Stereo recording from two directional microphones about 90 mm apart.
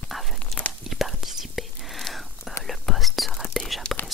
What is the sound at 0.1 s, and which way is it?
Whispering, 5° right (ahead or behind).